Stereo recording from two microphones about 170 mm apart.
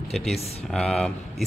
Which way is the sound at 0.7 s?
5° left (ahead or behind).